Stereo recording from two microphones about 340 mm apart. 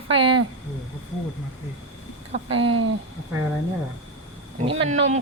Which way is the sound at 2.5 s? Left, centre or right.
Right.